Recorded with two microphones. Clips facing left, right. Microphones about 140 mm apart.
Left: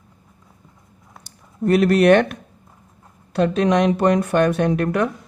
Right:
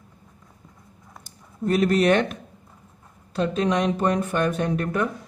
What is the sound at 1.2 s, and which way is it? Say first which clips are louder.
Speech: left 5 dB; 70° left (ahead or behind).